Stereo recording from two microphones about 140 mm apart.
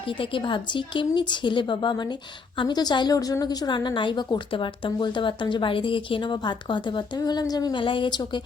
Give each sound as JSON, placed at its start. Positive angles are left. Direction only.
{"t": 0.1, "sound": "a woman's voice", "side_deg": 35}